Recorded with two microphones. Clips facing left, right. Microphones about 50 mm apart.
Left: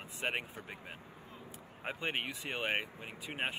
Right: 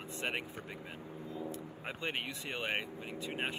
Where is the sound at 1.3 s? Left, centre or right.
Right.